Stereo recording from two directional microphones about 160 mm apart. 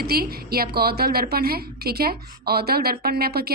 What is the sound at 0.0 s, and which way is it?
Speech, 75° right (ahead or behind).